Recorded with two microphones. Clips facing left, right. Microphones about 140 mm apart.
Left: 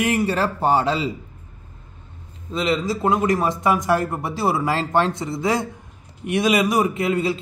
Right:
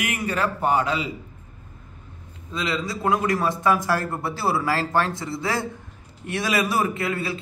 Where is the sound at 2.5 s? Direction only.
25° left (ahead or behind).